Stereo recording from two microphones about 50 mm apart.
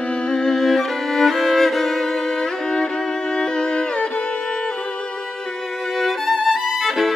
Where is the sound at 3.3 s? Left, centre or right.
Centre.